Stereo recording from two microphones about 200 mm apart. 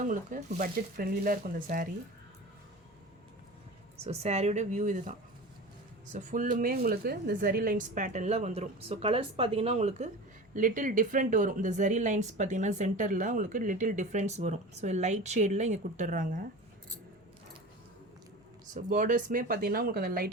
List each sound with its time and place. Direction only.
0.0 s speech: 40° right (ahead or behind)
4.0 s speech: 30° right (ahead or behind)
6.1 s speech: 40° right (ahead or behind)
18.7 s speech: 40° right (ahead or behind)